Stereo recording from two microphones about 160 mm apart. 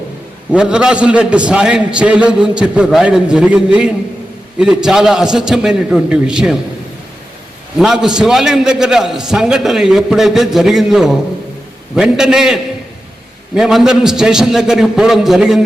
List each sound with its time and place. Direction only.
0.5 s a man's voice: 5° right (ahead or behind)
7.8 s a man's voice: 5° right (ahead or behind)